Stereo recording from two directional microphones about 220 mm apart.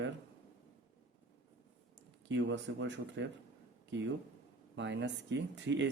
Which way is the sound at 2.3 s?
55° right (ahead or behind).